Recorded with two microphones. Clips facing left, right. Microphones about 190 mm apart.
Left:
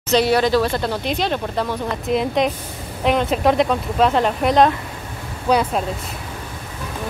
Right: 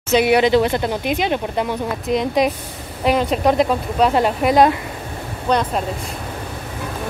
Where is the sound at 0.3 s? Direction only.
20° right (ahead or behind).